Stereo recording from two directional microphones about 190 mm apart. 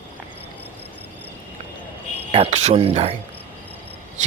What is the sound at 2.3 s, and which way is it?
Speech, 35° right (ahead or behind).